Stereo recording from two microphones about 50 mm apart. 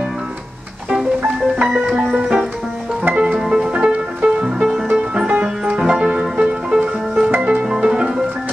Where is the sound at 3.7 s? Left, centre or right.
Right.